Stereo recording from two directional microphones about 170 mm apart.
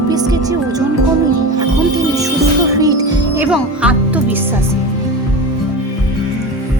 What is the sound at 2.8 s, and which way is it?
Music, 20° right (ahead or behind).